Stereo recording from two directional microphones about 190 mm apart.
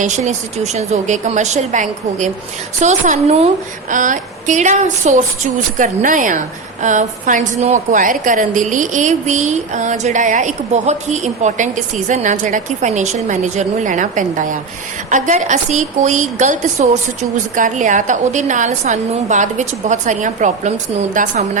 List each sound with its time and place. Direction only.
0.0 s a woman's voice: 40° right (ahead or behind)